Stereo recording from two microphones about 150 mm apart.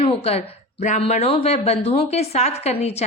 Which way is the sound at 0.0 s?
40° left (ahead or behind).